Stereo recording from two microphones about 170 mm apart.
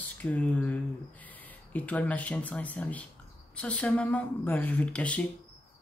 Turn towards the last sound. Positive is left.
turn(degrees=10)  # may be behind; listen again after turning